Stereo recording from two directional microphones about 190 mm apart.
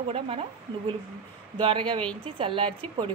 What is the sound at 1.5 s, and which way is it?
A woman's voice, 25° right (ahead or behind).